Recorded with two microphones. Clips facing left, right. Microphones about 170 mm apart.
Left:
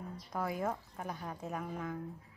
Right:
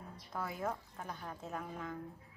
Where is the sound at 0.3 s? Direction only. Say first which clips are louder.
Left 3 dB; 10° left (ahead or behind).